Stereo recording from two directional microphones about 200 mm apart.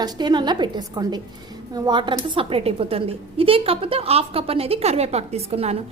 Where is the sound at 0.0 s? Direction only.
20° right (ahead or behind).